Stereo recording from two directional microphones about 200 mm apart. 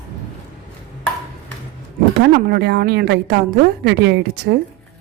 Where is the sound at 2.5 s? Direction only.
55° right (ahead or behind).